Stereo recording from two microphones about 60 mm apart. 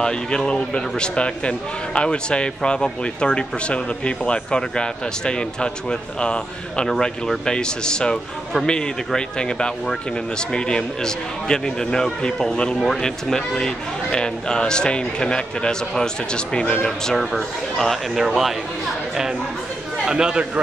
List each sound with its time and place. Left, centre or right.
0.0 s speech: centre
17.1 s speech: centre
18.1 s speech: centre
20.1 s a man's voice: centre